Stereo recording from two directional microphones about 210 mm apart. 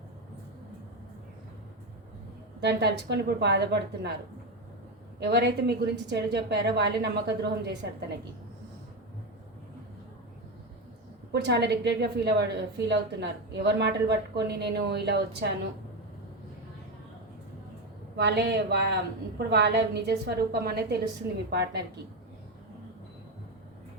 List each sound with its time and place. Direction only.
2.6 s a woman's voice: 55° right (ahead or behind)
5.2 s a woman's voice: 50° right (ahead or behind)
11.3 s a woman's voice: 55° right (ahead or behind)
18.2 s a woman's voice: 55° right (ahead or behind)